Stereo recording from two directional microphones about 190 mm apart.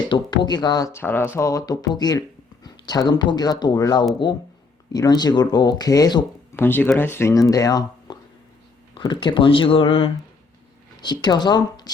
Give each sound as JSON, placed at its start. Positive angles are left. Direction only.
{"t": 0.1, "sound": "speech", "side_deg": 25}